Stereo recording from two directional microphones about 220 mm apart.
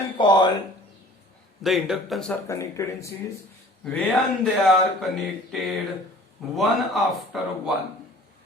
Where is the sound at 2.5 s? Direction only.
15° left (ahead or behind).